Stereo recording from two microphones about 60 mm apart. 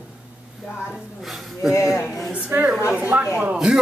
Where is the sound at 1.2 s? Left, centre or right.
Centre.